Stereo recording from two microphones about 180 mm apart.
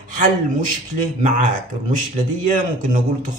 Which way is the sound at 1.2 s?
45° right (ahead or behind).